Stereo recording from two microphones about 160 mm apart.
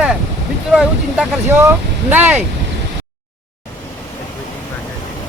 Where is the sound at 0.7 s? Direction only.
5° right (ahead or behind).